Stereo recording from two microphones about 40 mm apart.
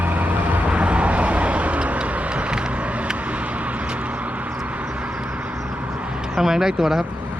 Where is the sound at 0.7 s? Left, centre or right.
Right.